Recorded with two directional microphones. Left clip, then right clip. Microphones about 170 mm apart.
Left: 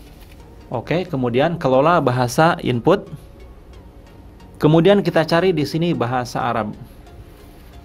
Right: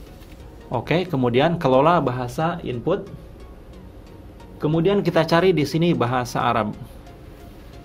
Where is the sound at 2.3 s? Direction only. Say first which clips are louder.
Left 9 dB; 40° left (ahead or behind).